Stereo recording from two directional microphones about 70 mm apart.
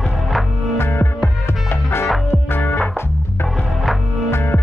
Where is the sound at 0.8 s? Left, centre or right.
Left.